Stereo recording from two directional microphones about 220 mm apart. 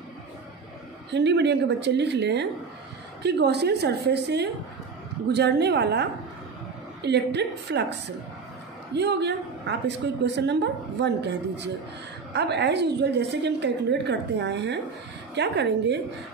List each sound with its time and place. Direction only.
1.1 s a woman's voice: 50° right (ahead or behind)
8.9 s a woman's voice: 50° right (ahead or behind)